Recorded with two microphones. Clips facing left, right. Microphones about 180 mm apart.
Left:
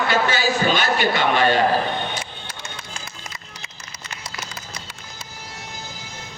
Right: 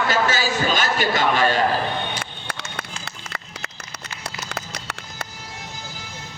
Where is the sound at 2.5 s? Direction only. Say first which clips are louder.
Right 3 dB; 70° right (ahead or behind).